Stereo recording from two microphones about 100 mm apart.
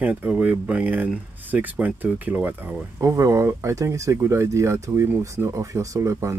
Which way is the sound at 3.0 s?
30° right (ahead or behind).